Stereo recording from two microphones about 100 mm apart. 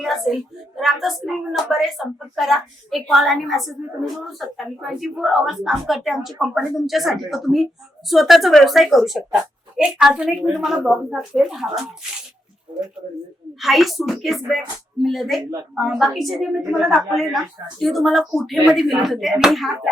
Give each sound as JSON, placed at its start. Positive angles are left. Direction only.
{"t": 0.0, "sound": "a sound", "side_deg": 0}
{"t": 0.8, "sound": "a woman's voice", "side_deg": 0}
{"t": 13.6, "sound": "a woman's voice", "side_deg": 0}